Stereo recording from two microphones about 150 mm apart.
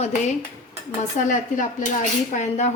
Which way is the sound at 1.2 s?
60° left (ahead or behind).